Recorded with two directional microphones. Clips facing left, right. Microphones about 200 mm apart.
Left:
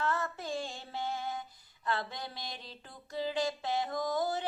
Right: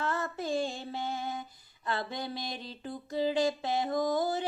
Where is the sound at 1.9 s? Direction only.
10° right (ahead or behind).